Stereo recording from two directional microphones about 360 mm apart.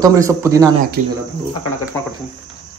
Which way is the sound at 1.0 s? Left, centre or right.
Right.